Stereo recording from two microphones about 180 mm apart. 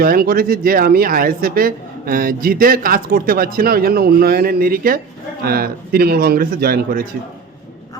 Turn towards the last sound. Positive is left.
turn(degrees=-55)  # may be behind; listen again after turning